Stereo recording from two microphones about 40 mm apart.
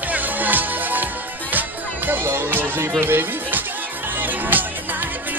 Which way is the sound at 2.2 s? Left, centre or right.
Right.